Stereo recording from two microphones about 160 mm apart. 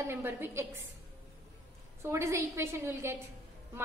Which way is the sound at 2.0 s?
15° right (ahead or behind).